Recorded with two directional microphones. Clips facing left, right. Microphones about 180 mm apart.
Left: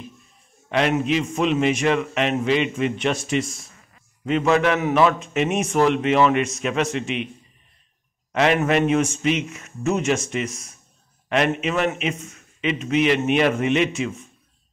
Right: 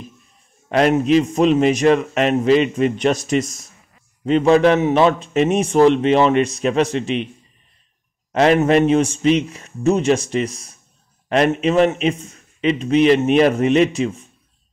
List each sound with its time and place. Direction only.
0.7 s a man's voice: 40° right (ahead or behind)
8.3 s a man's voice: 35° right (ahead or behind)